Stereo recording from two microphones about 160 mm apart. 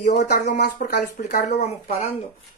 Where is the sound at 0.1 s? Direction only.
90° left.